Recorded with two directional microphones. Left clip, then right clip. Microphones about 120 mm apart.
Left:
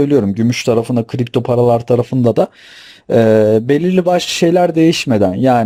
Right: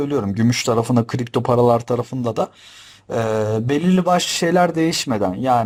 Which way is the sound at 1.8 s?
15° left (ahead or behind).